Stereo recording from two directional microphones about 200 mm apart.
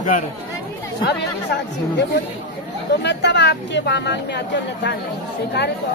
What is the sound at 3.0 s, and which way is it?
Speech, 60° left (ahead or behind).